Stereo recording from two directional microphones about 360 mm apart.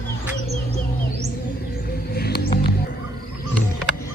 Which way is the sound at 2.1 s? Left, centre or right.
Left.